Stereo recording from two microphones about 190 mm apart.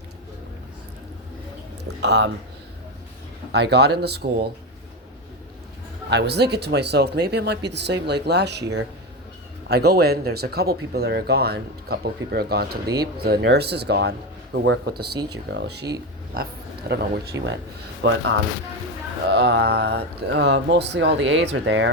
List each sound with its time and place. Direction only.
1.8 s speech: 65° right (ahead or behind)
3.5 s speech: 60° right (ahead or behind)
6.1 s speech: 60° right (ahead or behind)
16.9 s speech: 70° right (ahead or behind)
19.3 s speech: 60° right (ahead or behind)